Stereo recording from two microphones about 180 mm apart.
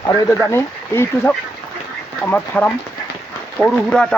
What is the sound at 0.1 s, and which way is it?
Speech, 15° left (ahead or behind).